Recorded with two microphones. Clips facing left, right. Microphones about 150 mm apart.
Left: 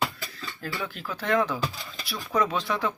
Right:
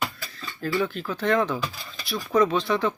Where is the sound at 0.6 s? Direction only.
5° left (ahead or behind).